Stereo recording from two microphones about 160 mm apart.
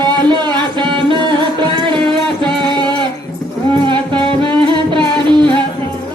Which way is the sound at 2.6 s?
25° right (ahead or behind).